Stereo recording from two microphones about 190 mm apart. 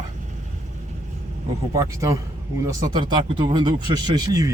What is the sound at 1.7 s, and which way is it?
Speech, 15° right (ahead or behind).